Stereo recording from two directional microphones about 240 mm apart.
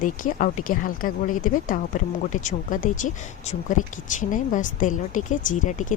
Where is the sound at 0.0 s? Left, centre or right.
Left.